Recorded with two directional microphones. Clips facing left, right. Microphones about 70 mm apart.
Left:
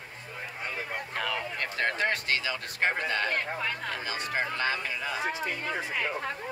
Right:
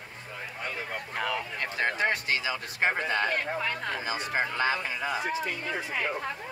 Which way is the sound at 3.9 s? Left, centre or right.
Centre.